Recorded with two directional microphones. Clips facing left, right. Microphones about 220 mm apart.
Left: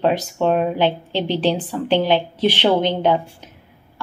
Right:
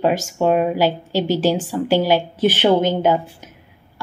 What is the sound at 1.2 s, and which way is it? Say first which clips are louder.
Speech: right 1 dB; 45° right (ahead or behind).